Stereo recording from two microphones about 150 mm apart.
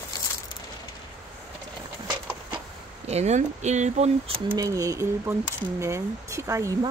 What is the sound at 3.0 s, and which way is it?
Speech, 45° right (ahead or behind).